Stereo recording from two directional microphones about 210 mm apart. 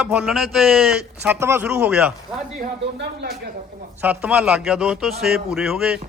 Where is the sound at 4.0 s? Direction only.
5° right (ahead or behind).